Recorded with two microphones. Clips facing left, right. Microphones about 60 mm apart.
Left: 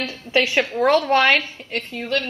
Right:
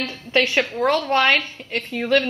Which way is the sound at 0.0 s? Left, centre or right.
Centre.